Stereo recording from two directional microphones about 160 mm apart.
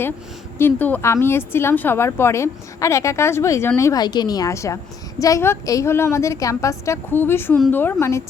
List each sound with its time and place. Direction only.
0.6 s a woman's voice: 10° left (ahead or behind)